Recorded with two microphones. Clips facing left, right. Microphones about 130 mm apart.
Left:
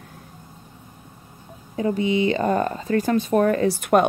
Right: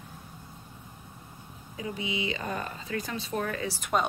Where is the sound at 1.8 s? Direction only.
45° left (ahead or behind).